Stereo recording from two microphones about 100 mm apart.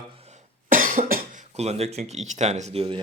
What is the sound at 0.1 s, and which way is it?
Cough, 80° right.